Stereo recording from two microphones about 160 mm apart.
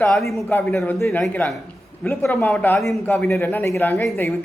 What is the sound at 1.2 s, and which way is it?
A man's voice, 5° left (ahead or behind).